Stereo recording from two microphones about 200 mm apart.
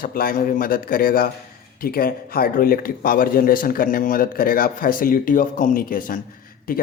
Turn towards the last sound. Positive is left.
turn(degrees=45)  # may be behind; listen again after turning